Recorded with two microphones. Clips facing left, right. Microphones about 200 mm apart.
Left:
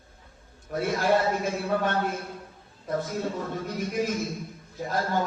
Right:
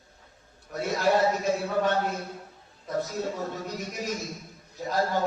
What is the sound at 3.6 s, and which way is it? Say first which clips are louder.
Speech: left 5 dB; 50° left (ahead or behind).